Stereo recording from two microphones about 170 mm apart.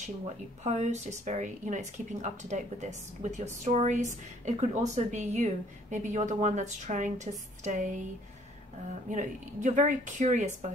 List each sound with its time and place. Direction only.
0.7 s a woman's voice: 45° right (ahead or behind)
9.1 s a woman's voice: 45° right (ahead or behind)